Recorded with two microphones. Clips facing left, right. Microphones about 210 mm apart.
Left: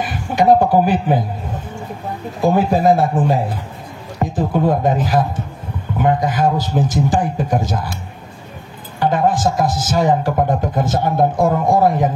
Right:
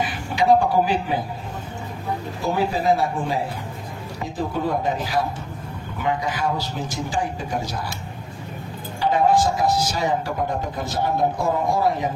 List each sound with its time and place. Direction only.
0.0 s speech: 50° left (ahead or behind)
2.5 s speech: 50° left (ahead or behind)
9.0 s speech: 50° left (ahead or behind)